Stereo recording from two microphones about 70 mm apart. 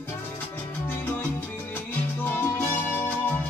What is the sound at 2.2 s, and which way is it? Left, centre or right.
Salsa music, left.